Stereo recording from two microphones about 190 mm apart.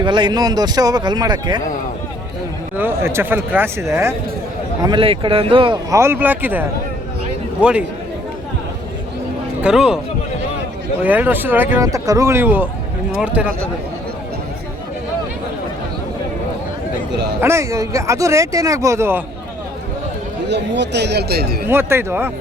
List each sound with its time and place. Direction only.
0.0 s speech: 25° right (ahead or behind)
2.7 s speech: 10° right (ahead or behind)
4.8 s speech: 25° right (ahead or behind); by 7.9 s 5° right (ahead or behind)
9.6 s speech: 5° right (ahead or behind)
11.0 s speech: 10° right (ahead or behind)
17.4 s speech: 15° right (ahead or behind)
20.5 s speech: 65° right (ahead or behind)
21.7 s speech: 10° right (ahead or behind)